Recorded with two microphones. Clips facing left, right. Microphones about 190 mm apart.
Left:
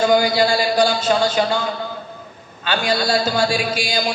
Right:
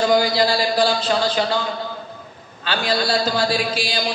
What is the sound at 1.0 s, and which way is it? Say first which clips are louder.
Speech: left 2 dB; 45° left (ahead or behind).